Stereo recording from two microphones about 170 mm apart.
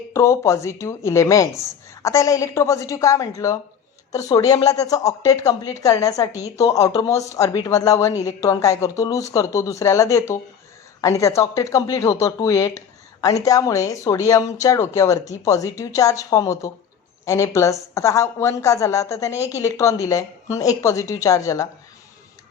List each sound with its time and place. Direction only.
0.1 s a woman's voice: 15° left (ahead or behind)